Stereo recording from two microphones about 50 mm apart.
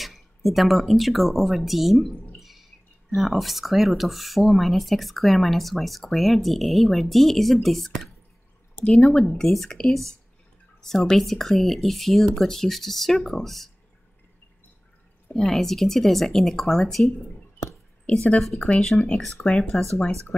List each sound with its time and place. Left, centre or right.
0.0 s speech: centre
2.3 s a sound: centre
3.2 s speech: centre
8.8 s speech: centre
15.3 s speech: centre
18.6 s speech: left
18.9 s speech: centre